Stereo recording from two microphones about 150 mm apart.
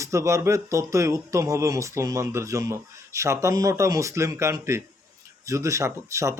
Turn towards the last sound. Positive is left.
turn(degrees=-20)  # may be behind; listen again after turning